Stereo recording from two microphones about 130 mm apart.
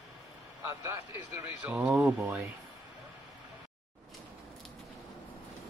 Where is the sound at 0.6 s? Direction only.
15° right (ahead or behind).